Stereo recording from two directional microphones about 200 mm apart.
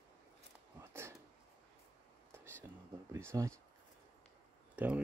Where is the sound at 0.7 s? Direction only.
15° right (ahead or behind).